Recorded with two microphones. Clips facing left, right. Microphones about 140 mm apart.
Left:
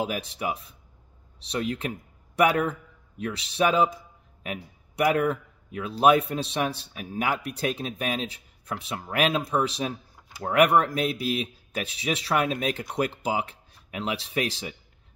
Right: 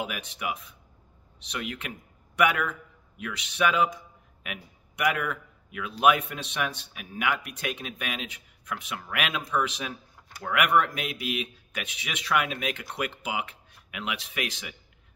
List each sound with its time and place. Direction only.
0.0 s speech: 35° left (ahead or behind)